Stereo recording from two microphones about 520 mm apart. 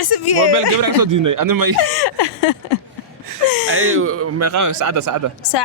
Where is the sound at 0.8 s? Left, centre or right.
Right.